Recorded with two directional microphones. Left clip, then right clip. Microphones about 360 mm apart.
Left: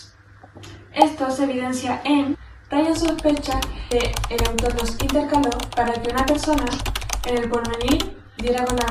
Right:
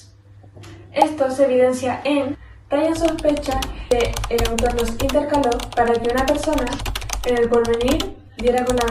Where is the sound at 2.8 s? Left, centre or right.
Centre.